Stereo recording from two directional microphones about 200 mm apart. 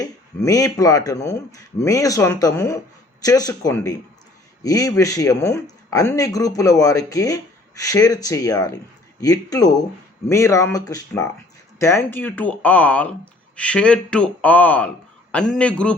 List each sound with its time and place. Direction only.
0.0 s speech: 15° left (ahead or behind)